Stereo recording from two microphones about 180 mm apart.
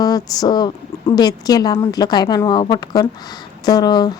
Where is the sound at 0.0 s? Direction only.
20° left (ahead or behind).